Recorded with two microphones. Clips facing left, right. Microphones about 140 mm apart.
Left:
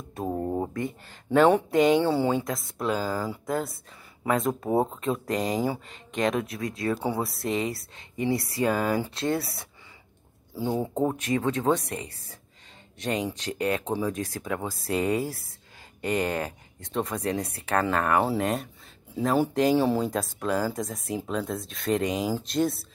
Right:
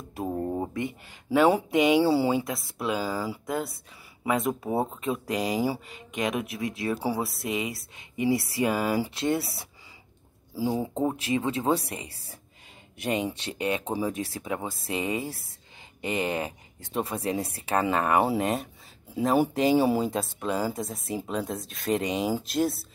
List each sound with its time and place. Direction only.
0.3 s a sound: 10° left (ahead or behind)
1.3 s speech: 5° right (ahead or behind)
6.3 s speech: 25° right (ahead or behind)
7.2 s speech: centre (ahead or behind)
8.4 s speech: 20° right (ahead or behind)
8.7 s speech: 10° right (ahead or behind)
9.1 s speech: 25° right (ahead or behind)
10.8 s speech: 5° right (ahead or behind)
11.1 s speech: 30° right (ahead or behind)
11.4 s speech: centre (ahead or behind)